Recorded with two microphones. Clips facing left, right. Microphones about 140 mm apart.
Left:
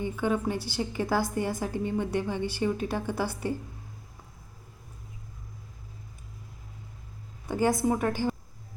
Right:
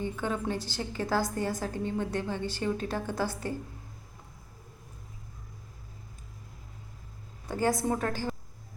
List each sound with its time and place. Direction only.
0.0 s a woman's voice: 10° left (ahead or behind)
7.4 s a woman's voice: 15° left (ahead or behind)